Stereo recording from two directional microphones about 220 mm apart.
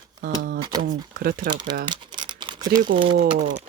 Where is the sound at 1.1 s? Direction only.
40° right (ahead or behind).